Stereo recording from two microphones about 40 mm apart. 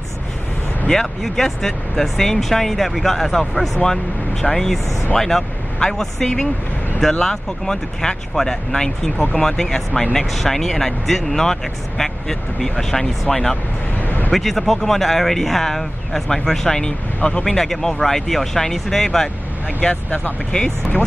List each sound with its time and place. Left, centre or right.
0.9 s speech: centre
1.2 s speech: centre
13.9 s a sound: left
14.3 s speech: centre; by 17.5 s left
17.5 s speech: centre
20.5 s speech: left